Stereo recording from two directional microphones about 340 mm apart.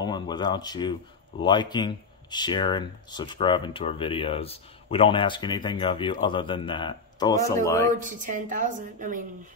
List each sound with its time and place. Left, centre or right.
0.0 s speech: centre
7.9 s a woman's voice: right